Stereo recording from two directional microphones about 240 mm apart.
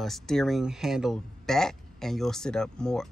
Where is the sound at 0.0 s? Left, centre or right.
Centre.